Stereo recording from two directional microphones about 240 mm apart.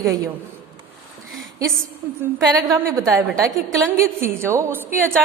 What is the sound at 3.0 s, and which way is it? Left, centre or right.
Speech, centre.